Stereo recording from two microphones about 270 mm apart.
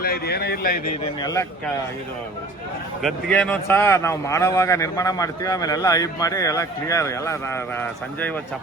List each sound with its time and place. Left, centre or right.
0.0 s a man's voice: left
1.2 s a man's voice: centre
3.0 s a man's voice: centre